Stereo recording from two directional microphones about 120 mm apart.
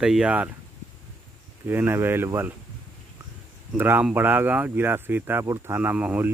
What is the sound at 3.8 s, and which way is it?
Speech, 15° right (ahead or behind).